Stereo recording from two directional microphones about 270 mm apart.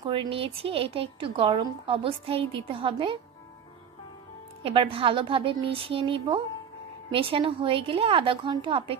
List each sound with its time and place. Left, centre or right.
0.0 s a woman's voice: centre
4.6 s a woman's voice: right